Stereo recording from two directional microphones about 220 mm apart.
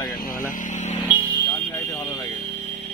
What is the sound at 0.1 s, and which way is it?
Vehicle, 40° left (ahead or behind).